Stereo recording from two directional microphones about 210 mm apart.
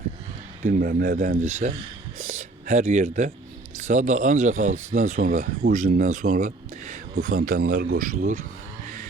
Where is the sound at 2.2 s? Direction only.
35° right (ahead or behind).